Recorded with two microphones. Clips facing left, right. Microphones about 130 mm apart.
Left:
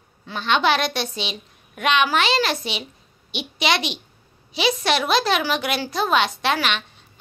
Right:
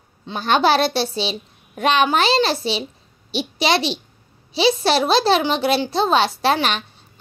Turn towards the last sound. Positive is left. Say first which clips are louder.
# right 4 dB
turn(degrees=-35)  # may be behind; listen again after turning